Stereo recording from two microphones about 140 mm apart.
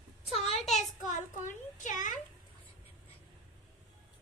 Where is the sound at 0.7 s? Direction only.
60° left (ahead or behind).